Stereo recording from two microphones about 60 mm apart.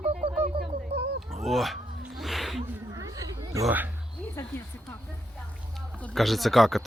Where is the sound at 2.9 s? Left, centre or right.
Right.